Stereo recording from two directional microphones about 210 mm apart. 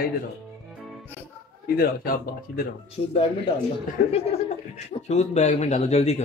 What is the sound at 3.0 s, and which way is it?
Speech, 30° left (ahead or behind).